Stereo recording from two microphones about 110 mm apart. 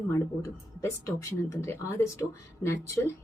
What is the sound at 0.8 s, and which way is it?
Speech, 25° left (ahead or behind).